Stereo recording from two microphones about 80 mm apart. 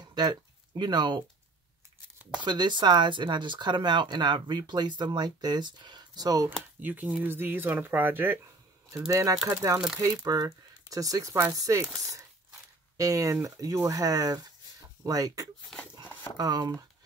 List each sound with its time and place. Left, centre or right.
0.0 s speech: right
2.4 s speech: right
6.8 s speech: right
9.1 s speech: right
10.2 s speech: right
12.9 s speech: right